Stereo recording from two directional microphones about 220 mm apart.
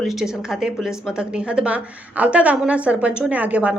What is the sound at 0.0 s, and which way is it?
A woman's voice, centre (ahead or behind).